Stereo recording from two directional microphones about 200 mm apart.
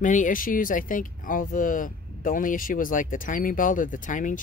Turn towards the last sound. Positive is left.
turn(degrees=40)  # may be behind; listen again after turning